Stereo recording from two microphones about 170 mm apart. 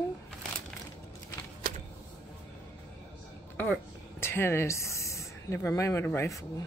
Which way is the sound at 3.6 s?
10° left (ahead or behind).